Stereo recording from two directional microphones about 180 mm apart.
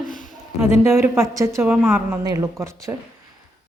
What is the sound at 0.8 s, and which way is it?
A woman's voice, 15° right (ahead or behind).